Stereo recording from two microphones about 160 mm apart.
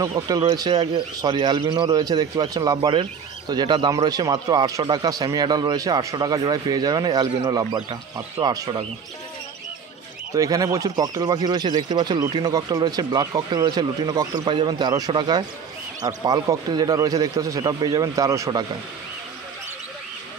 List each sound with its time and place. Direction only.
0.3 s a man's voice: 25° right (ahead or behind)
10.3 s a man's voice: 20° right (ahead or behind)